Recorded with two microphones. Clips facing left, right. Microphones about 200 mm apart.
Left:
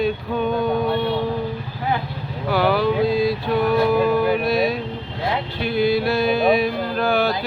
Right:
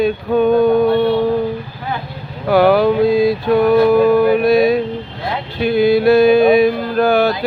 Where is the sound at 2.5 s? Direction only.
50° right (ahead or behind).